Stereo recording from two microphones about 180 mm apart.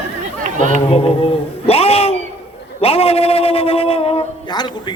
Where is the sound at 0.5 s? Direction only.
45° right (ahead or behind).